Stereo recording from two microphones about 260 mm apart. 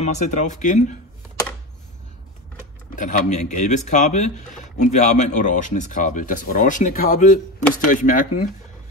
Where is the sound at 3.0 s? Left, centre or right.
Left.